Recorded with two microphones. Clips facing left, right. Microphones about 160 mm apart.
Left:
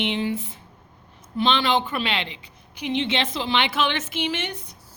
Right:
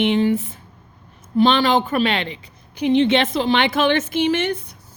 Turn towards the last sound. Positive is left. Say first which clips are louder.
# right 9 dB
turn(degrees=-55)  # may be behind; listen again after turning